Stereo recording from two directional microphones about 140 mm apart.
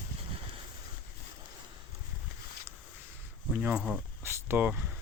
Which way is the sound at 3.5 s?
10° right (ahead or behind).